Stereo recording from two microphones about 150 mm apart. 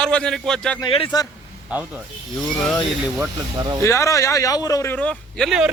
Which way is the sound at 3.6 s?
25° right (ahead or behind).